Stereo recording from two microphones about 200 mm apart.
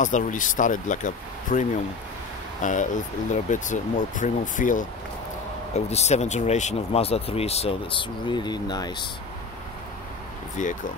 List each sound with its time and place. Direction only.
0.0 s speech: 40° left (ahead or behind)
5.9 s speech: 35° left (ahead or behind)
10.6 s speech: 40° left (ahead or behind)